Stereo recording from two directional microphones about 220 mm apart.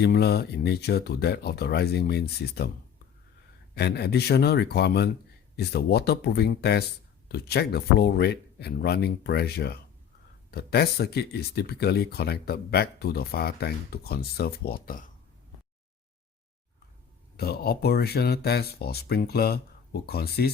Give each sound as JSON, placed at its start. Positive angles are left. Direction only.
{"t": 0.0, "sound": "speech", "side_deg": 45}
{"t": 3.8, "sound": "speech", "side_deg": 50}
{"t": 17.3, "sound": "speech", "side_deg": 45}